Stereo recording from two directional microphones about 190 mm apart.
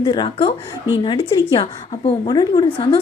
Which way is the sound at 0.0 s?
25° left (ahead or behind).